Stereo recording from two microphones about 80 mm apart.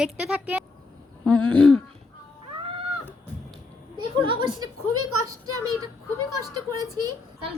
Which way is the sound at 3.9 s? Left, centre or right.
Right.